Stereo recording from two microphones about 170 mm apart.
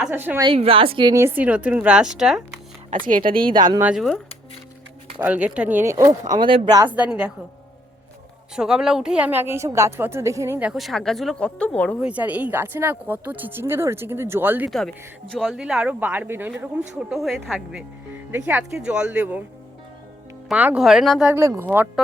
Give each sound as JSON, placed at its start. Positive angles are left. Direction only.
{"t": 0.0, "sound": "speech", "side_deg": -10}
{"t": 0.4, "sound": "a woman's voice", "side_deg": -35}
{"t": 1.1, "sound": "speech", "side_deg": -10}
{"t": 2.9, "sound": "speech", "side_deg": -50}
{"t": 3.4, "sound": "speech", "side_deg": -25}
{"t": 3.8, "sound": "a woman's voice", "side_deg": -5}
{"t": 5.2, "sound": "speech", "side_deg": -10}
{"t": 6.8, "sound": "speech", "side_deg": -10}
{"t": 8.5, "sound": "a woman's voice", "side_deg": -5}
{"t": 11.9, "sound": "speech", "side_deg": -5}
{"t": 15.3, "sound": "speech", "side_deg": 5}
{"t": 20.5, "sound": "a woman's voice", "side_deg": -5}
{"t": 21.3, "sound": "speech", "side_deg": -15}